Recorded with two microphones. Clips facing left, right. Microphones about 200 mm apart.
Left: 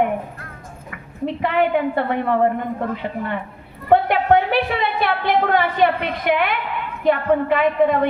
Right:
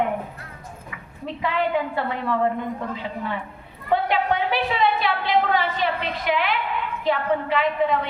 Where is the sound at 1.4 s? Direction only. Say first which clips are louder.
Left 4 dB; 60° left (ahead or behind).